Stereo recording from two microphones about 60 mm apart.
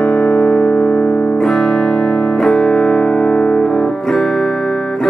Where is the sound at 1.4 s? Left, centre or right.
Centre.